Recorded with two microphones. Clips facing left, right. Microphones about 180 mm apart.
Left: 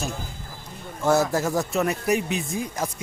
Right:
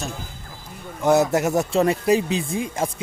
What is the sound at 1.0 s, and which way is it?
Speech, 20° right (ahead or behind).